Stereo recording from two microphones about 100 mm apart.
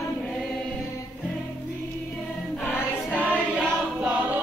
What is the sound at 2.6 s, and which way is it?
Choir, 15° left (ahead or behind).